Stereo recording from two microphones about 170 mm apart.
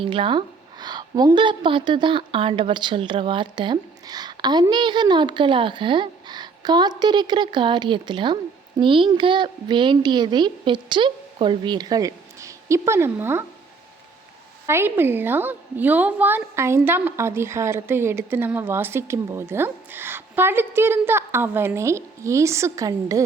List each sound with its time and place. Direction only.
0.0 s a woman's voice: 30° right (ahead or behind); by 13.4 s 15° right (ahead or behind)
14.7 s a woman's voice: 15° right (ahead or behind)